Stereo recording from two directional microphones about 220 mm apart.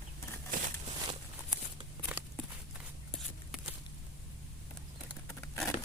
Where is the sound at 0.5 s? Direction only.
35° right (ahead or behind).